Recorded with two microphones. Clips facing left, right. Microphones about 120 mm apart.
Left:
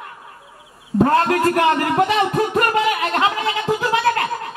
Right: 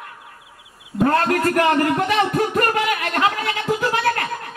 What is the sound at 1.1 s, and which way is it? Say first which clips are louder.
Speech: even; 25° left (ahead or behind).